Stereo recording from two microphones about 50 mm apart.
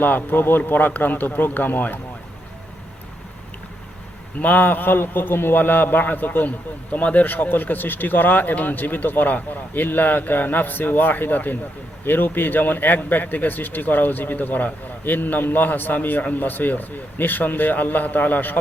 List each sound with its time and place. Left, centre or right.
0.0 s a man's voice: left
4.4 s a man's voice: left